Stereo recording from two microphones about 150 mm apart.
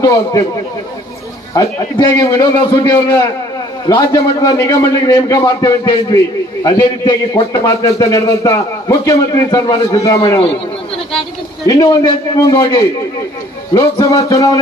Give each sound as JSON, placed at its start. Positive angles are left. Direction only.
{"t": 0.0, "sound": "speech", "side_deg": 20}
{"t": 1.5, "sound": "speech", "side_deg": 25}
{"t": 11.6, "sound": "speech", "side_deg": 25}